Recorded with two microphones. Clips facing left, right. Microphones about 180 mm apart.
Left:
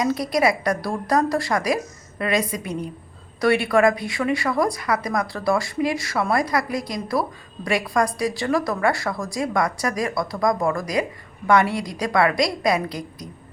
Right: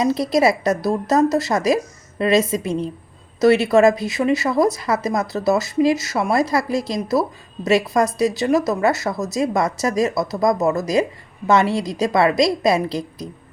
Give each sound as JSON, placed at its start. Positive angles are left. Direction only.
{"t": 0.0, "sound": "a woman's voice", "side_deg": -25}